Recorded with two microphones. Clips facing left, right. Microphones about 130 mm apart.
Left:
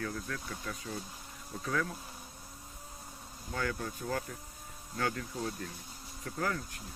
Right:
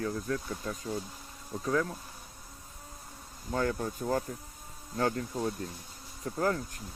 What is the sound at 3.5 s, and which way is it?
Speech, 35° right (ahead or behind).